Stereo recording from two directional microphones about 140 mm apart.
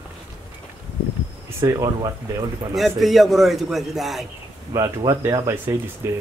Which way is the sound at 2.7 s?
Centre (ahead or behind).